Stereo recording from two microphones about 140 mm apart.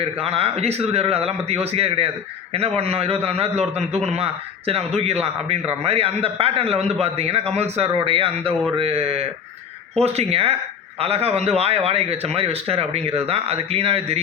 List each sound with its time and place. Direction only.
0.0 s a man's voice: 45° right (ahead or behind)